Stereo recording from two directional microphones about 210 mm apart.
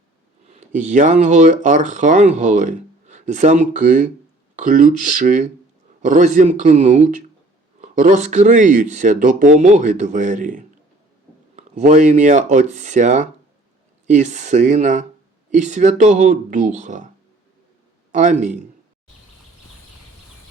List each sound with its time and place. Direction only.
0.4 s speech: 35° right (ahead or behind)
18.1 s speech: 35° right (ahead or behind)